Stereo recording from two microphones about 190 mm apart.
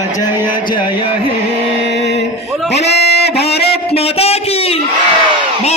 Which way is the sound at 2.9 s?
60° left (ahead or behind).